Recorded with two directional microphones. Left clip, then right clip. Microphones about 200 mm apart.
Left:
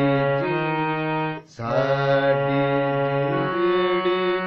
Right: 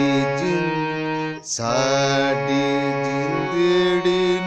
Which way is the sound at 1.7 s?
55° right (ahead or behind).